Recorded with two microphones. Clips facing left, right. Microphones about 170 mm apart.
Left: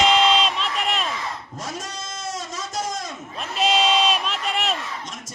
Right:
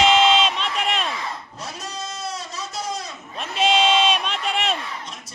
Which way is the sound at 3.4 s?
Centre (ahead or behind).